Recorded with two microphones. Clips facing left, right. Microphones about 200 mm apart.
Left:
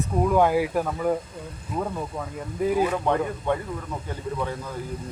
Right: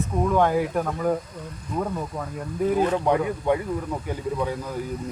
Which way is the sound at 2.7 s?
5° left (ahead or behind).